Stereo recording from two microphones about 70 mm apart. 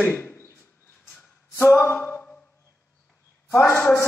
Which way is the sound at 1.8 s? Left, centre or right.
Left.